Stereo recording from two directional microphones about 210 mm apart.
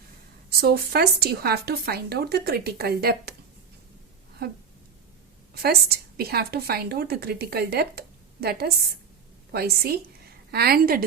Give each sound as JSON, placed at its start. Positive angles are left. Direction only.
{"t": 0.6, "sound": "a woman's voice", "side_deg": -50}
{"t": 4.4, "sound": "a woman's voice", "side_deg": -50}
{"t": 5.6, "sound": "a woman's voice", "side_deg": -50}